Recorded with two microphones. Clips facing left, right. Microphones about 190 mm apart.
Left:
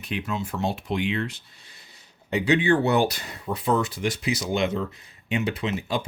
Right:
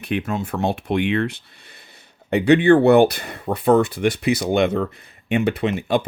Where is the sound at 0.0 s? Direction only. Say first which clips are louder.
Right 6 dB; 55° right (ahead or behind).